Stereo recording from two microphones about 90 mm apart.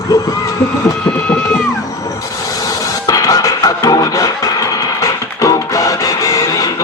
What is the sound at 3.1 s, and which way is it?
Music, 40° left (ahead or behind).